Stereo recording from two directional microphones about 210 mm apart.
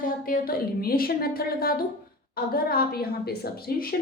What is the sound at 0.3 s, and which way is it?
A woman's voice, 45° left (ahead or behind).